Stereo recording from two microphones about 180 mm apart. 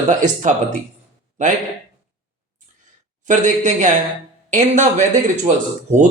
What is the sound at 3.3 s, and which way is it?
Speech, 45° right (ahead or behind).